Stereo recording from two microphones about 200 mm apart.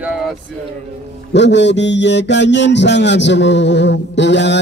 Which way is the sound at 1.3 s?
60° left (ahead or behind).